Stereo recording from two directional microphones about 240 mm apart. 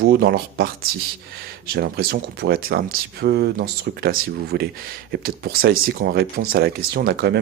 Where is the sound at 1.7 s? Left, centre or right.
Right.